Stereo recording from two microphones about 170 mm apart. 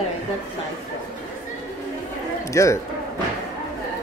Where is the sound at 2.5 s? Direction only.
20° left (ahead or behind).